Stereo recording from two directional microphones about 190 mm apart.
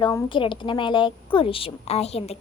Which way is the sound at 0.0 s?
25° left (ahead or behind).